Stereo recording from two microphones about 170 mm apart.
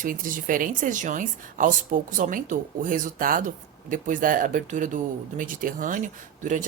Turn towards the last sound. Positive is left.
turn(degrees=-50)  # may be behind; listen again after turning